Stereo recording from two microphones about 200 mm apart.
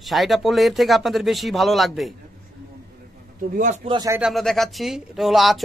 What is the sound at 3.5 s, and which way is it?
Speech, 40° right (ahead or behind).